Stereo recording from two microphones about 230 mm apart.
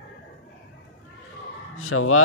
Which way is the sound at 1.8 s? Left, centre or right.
Left.